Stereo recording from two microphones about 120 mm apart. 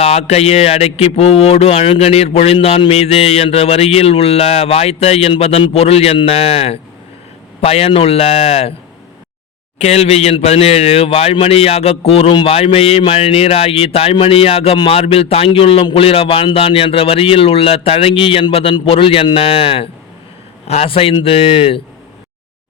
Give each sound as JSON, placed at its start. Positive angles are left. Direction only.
{"t": 0.0, "sound": "speech", "side_deg": 65}
{"t": 9.7, "sound": "speech", "side_deg": 65}